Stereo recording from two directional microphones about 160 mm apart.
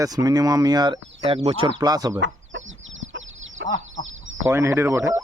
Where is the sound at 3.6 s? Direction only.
90° right.